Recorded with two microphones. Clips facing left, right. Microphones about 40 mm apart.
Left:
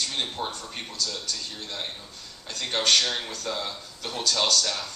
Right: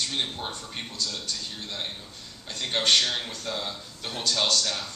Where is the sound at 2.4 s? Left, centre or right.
Right.